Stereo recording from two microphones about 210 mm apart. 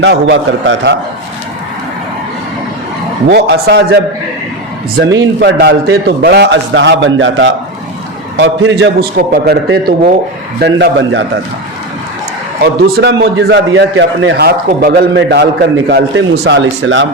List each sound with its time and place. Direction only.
0.0 s a man's voice: 60° right (ahead or behind)
3.2 s a man's voice: 50° right (ahead or behind)
5.4 s a man's voice: 50° right (ahead or behind)
12.6 s a man's voice: 55° right (ahead or behind)